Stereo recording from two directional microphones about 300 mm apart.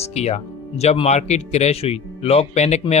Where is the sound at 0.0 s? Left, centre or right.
Left.